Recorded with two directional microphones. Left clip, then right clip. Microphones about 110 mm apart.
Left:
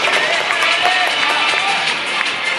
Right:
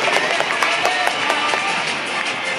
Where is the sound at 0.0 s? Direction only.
15° left (ahead or behind).